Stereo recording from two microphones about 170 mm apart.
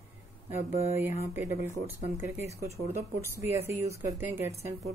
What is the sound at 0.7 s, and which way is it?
Speech, 15° right (ahead or behind).